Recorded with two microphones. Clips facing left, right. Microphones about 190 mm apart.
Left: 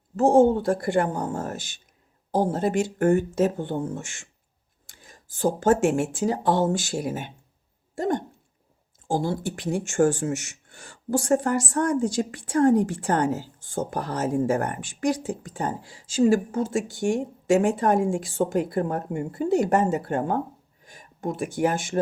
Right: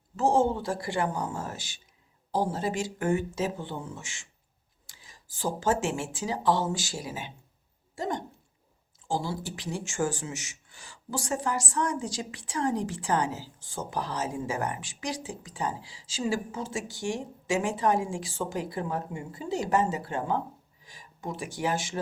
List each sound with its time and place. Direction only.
0.2 s speech: 55° left (ahead or behind)